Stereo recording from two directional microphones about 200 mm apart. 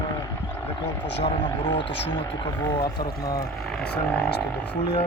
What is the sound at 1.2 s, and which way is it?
Speech, 30° left (ahead or behind).